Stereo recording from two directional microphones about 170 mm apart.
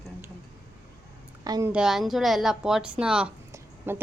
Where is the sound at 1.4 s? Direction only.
20° right (ahead or behind).